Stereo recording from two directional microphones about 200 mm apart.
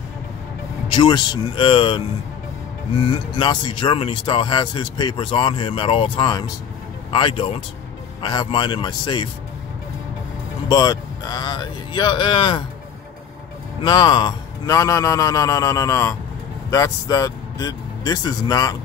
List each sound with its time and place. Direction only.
0.8 s speech: 25° left (ahead or behind)
10.7 s speech: 20° left (ahead or behind)
13.8 s a man's voice: 20° left (ahead or behind)